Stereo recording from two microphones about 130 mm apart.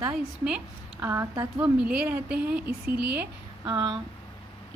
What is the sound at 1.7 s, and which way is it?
A woman's voice, 10° right (ahead or behind).